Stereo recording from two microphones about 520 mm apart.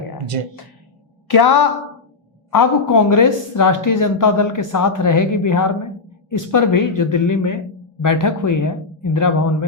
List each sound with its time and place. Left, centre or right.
0.3 s speech: right
1.3 s a woman's voice: left